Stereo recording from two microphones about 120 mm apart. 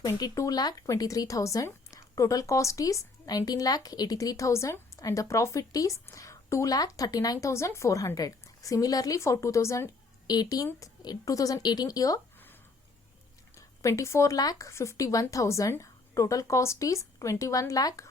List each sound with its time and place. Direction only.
0.0 s a woman's voice: 25° left (ahead or behind)
13.6 s speech: 25° left (ahead or behind)